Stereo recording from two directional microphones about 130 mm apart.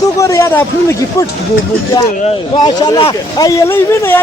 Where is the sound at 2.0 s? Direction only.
40° left (ahead or behind).